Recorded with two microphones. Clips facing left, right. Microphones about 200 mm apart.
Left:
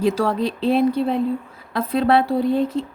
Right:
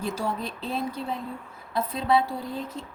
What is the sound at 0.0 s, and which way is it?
A woman's voice, 90° left.